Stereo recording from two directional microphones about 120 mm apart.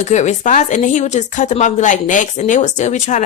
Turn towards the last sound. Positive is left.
turn(degrees=85)